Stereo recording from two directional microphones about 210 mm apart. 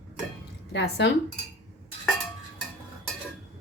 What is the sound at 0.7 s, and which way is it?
Speech, 55° left (ahead or behind).